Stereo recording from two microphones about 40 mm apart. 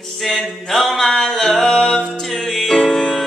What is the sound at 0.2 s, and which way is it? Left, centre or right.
Music, centre.